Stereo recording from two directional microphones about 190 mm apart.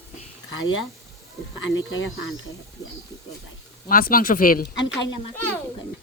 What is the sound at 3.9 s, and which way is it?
Speech, 50° left (ahead or behind).